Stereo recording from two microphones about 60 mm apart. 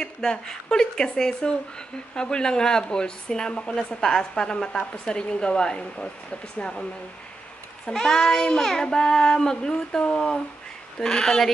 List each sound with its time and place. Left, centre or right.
0.0 s a woman's voice: centre